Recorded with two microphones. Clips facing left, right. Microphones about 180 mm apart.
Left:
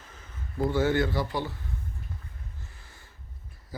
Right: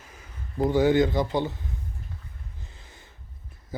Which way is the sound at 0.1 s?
15° right (ahead or behind).